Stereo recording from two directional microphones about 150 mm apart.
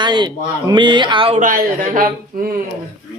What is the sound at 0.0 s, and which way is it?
Speech, 30° right (ahead or behind).